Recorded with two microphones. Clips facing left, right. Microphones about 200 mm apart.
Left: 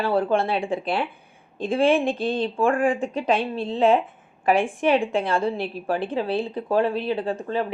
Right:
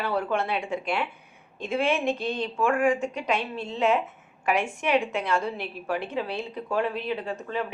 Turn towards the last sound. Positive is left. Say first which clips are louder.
# left 5 dB
turn(degrees=30)  # may be behind; listen again after turning